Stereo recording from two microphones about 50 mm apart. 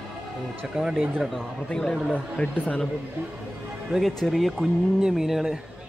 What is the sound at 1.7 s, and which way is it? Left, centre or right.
Speech, centre.